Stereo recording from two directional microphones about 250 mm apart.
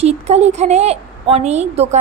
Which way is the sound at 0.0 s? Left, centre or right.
Right.